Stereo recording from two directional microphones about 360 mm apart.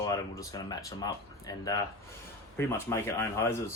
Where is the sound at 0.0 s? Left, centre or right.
Centre.